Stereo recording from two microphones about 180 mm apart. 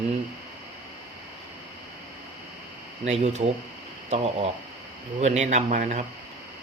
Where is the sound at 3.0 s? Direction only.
35° right (ahead or behind).